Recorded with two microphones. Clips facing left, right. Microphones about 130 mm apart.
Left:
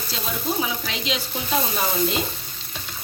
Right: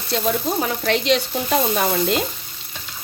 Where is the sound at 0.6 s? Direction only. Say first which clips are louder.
Right 7 dB; 60° right (ahead or behind).